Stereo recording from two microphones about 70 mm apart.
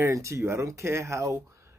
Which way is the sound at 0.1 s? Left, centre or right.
Right.